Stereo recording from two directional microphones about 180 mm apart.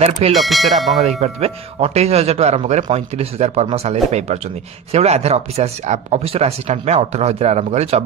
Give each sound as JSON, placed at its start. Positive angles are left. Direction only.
{"t": 0.3, "sound": "speech", "side_deg": 0}
{"t": 1.0, "sound": "speech", "side_deg": -35}